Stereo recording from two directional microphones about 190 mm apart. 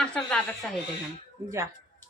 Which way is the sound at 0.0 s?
5° left (ahead or behind).